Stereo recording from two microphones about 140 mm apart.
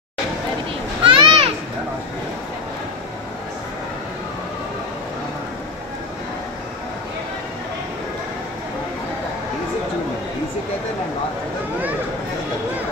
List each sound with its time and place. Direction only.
1.0 s children playing: 40° right (ahead or behind)